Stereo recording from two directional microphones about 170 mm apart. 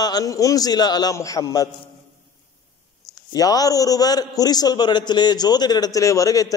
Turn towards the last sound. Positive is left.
turn(degrees=20)  # may be behind; listen again after turning